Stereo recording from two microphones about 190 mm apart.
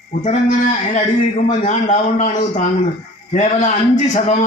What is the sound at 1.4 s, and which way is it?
A man's voice, 40° left (ahead or behind).